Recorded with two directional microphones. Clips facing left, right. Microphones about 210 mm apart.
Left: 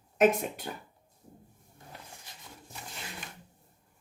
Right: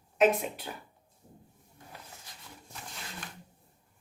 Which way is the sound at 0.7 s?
50° left (ahead or behind).